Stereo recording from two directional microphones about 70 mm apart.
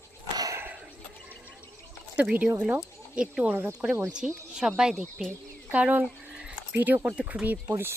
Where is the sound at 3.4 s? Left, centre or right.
Right.